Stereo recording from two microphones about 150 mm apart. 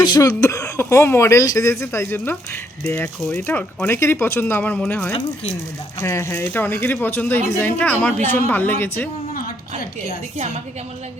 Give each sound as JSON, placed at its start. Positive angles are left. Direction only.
{"t": 0.0, "sound": "speech", "side_deg": 25}